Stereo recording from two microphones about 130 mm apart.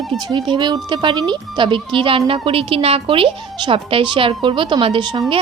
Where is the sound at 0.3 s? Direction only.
35° right (ahead or behind).